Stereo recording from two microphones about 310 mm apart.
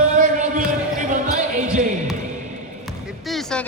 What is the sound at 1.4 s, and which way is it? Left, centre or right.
Basketball bounce, right.